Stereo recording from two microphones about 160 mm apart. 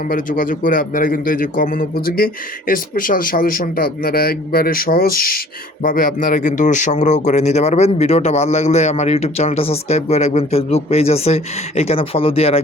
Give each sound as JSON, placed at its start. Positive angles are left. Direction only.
{"t": 0.1, "sound": "a man's voice", "side_deg": 55}